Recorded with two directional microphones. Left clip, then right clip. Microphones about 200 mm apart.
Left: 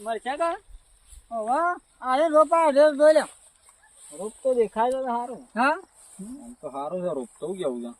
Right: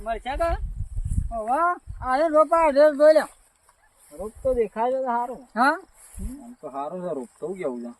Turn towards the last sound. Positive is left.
turn(degrees=-5)  # may be behind; listen again after turning